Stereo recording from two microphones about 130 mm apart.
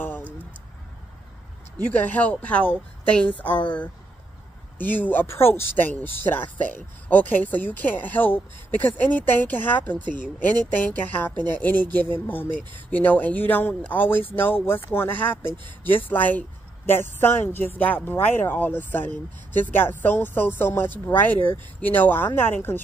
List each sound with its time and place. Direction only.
0.0 s a sound: 15° left (ahead or behind)
1.9 s speech: 10° left (ahead or behind)
4.7 s speech: 15° left (ahead or behind)